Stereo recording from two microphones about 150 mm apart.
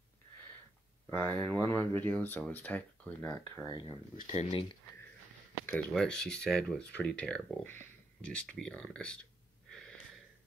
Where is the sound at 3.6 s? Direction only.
30° left (ahead or behind).